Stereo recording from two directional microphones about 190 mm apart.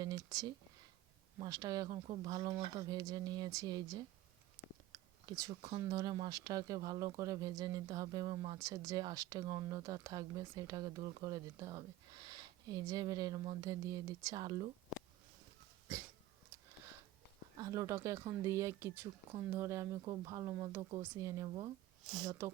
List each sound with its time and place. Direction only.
0.0 s speech: 20° right (ahead or behind)
17.6 s speech: 15° right (ahead or behind)